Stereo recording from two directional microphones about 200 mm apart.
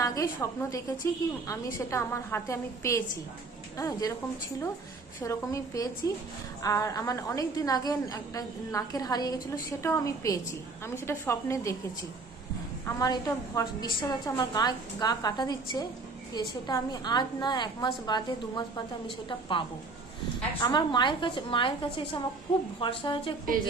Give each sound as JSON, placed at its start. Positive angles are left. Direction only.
{"t": 0.0, "sound": "a woman's voice", "side_deg": 15}
{"t": 5.2, "sound": "a woman's voice", "side_deg": 15}
{"t": 12.8, "sound": "a woman's voice", "side_deg": 15}